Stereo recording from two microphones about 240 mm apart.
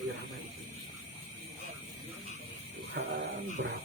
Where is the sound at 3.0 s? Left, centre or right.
Right.